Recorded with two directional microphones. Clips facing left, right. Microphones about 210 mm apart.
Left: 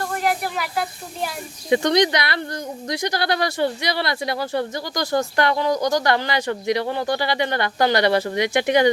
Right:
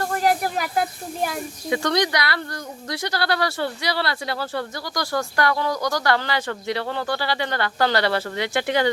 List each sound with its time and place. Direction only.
0.2 s speech: 40° right (ahead or behind)
1.7 s speech: 20° left (ahead or behind)